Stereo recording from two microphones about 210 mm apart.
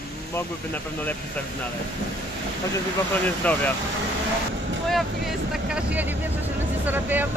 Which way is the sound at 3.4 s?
5° left (ahead or behind).